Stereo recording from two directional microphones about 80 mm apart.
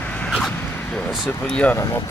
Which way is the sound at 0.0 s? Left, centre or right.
Centre.